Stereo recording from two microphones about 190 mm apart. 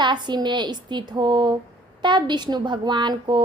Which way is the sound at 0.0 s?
25° right (ahead or behind).